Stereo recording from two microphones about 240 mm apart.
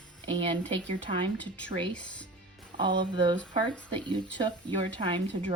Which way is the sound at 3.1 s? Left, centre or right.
Centre.